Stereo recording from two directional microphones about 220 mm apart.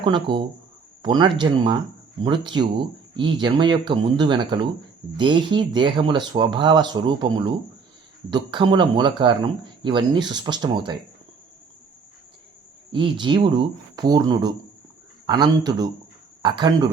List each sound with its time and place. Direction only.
0.0 s speech: 20° right (ahead or behind)
12.9 s speech: 20° right (ahead or behind)